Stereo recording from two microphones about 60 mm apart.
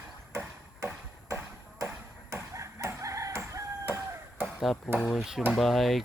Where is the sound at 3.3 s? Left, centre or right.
Right.